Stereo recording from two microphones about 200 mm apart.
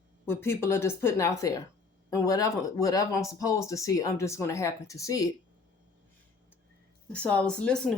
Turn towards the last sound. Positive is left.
turn(degrees=5)  # may be behind; listen again after turning